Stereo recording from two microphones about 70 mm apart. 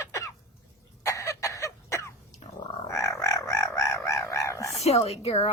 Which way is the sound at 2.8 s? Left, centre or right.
Left.